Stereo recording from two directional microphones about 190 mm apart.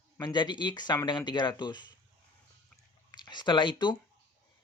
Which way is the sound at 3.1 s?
25° left (ahead or behind).